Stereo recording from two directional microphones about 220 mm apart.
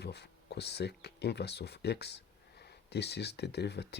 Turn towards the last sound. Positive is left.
turn(degrees=50)  # may be behind; listen again after turning